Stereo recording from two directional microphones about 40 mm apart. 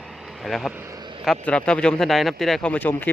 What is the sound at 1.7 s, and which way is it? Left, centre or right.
Speech, left.